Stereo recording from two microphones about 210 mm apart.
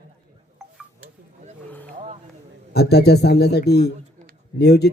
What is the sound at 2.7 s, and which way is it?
A man's voice, 50° left (ahead or behind).